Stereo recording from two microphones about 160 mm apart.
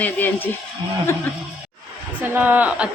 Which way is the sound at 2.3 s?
10° right (ahead or behind).